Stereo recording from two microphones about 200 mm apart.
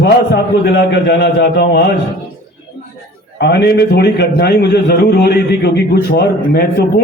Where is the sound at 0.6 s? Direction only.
60° left (ahead or behind).